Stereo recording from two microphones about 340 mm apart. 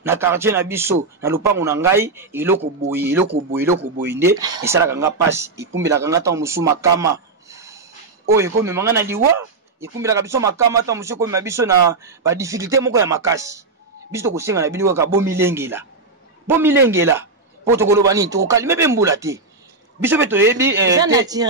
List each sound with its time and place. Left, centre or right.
0.0 s speech: centre